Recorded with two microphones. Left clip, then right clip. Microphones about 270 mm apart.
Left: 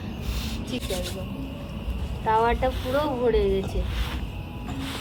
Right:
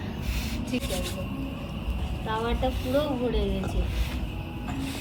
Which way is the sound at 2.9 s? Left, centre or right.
Left.